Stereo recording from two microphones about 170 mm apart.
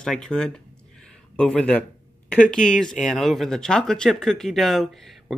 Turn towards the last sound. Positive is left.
turn(degrees=0)  # may be behind; listen again after turning